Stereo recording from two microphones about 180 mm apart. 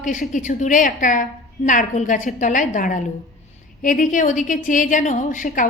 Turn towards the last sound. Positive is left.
turn(degrees=45)  # may be behind; listen again after turning